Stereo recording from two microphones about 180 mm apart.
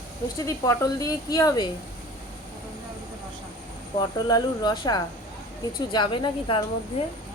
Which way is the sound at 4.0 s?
20° left (ahead or behind).